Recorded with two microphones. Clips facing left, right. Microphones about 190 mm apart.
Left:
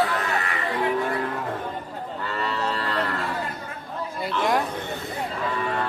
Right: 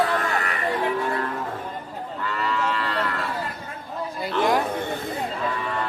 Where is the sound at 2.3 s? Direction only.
35° left (ahead or behind).